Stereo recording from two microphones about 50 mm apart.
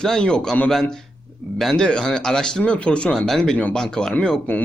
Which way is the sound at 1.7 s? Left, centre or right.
Centre.